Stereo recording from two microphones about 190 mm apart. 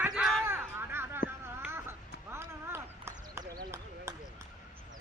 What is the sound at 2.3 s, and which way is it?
Clip-clop, 15° right (ahead or behind).